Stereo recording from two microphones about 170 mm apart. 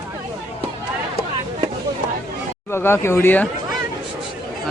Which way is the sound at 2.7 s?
15° left (ahead or behind).